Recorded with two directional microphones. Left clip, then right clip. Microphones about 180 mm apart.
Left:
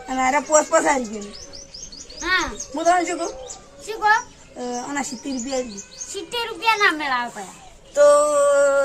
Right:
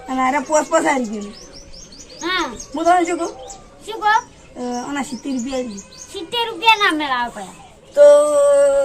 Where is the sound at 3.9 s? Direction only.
Centre (ahead or behind).